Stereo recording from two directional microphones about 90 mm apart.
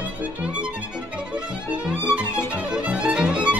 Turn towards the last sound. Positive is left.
turn(degrees=-10)  # may be behind; listen again after turning